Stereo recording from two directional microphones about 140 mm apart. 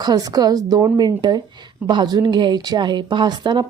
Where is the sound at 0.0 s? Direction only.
30° right (ahead or behind).